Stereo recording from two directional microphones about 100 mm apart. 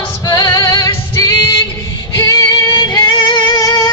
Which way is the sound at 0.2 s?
45° left (ahead or behind).